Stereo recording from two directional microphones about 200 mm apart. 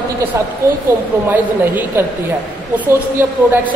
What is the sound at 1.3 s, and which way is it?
Speech, 10° right (ahead or behind).